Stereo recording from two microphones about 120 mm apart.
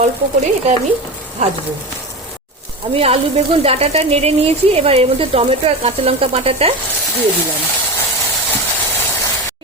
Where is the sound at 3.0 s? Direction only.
55° right (ahead or behind).